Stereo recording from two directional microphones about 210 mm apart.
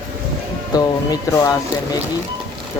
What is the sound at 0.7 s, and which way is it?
Speech, 20° left (ahead or behind).